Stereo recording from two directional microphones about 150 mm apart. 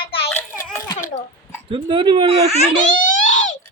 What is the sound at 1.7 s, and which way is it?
Speech, 35° right (ahead or behind).